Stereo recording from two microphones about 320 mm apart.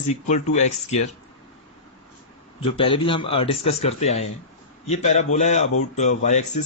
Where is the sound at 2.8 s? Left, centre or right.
Centre.